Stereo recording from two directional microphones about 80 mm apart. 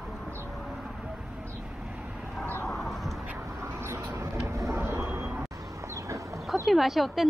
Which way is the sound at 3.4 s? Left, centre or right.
Right.